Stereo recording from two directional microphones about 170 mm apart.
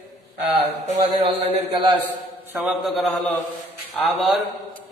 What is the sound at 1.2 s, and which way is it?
Speech, 30° right (ahead or behind).